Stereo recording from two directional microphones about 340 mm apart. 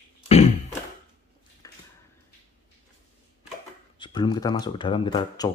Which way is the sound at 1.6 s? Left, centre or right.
Centre.